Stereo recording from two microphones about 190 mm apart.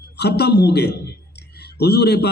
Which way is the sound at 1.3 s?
60° left (ahead or behind).